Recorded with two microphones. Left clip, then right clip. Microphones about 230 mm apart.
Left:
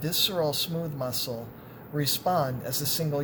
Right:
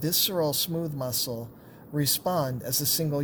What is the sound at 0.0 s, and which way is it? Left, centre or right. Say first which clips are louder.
Speech: even; right.